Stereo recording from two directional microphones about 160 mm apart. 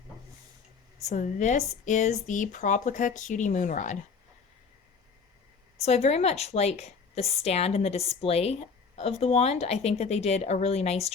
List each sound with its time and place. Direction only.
1.0 s speech: 50° left (ahead or behind)
5.8 s a woman's voice: 40° left (ahead or behind)